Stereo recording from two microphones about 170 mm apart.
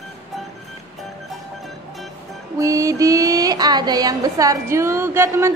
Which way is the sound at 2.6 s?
20° right (ahead or behind).